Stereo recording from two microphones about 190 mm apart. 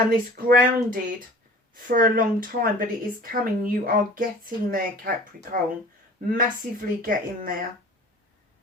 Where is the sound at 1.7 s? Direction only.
45° right (ahead or behind).